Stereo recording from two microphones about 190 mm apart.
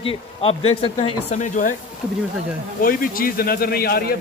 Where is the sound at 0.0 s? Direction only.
30° left (ahead or behind).